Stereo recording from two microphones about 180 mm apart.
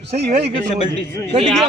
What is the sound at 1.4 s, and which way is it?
Speech, centre (ahead or behind).